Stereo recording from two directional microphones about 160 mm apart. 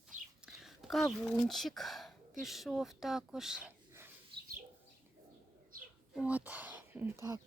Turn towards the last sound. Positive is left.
turn(degrees=-20)  # may be behind; listen again after turning